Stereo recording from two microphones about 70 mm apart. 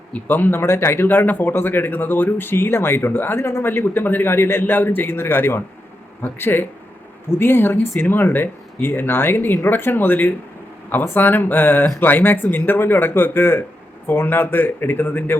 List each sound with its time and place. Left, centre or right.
0.1 s a man's voice: left
3.7 s a man's voice: left